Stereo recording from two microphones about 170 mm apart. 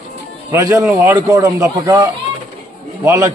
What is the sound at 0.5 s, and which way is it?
A man's voice, 20° right (ahead or behind).